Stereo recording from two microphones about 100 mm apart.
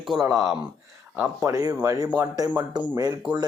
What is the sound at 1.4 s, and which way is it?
Speech, 35° right (ahead or behind).